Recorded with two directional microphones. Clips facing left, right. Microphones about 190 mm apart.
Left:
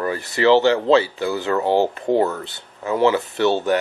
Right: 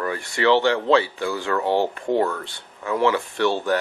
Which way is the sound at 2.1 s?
25° left (ahead or behind).